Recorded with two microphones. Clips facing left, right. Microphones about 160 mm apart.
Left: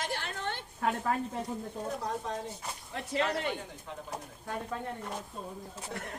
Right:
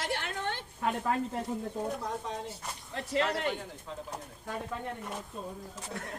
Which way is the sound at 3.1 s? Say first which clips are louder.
Right 1 dB; 20° left (ahead or behind).